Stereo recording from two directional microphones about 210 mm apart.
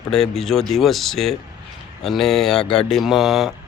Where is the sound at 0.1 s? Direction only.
Centre (ahead or behind).